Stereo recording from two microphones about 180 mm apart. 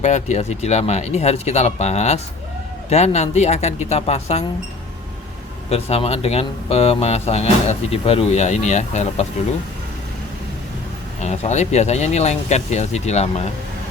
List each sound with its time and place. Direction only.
0.0 s speech: 40° left (ahead or behind)
5.7 s speech: 35° left (ahead or behind)
11.2 s speech: 40° left (ahead or behind)